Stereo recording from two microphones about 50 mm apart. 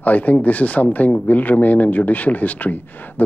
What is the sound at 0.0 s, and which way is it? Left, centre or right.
Speech, left.